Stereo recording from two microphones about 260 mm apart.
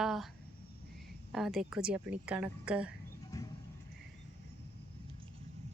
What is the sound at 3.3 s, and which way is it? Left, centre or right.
Clip-clop, centre.